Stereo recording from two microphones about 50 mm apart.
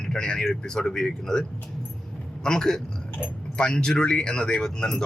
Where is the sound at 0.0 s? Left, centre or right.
Centre.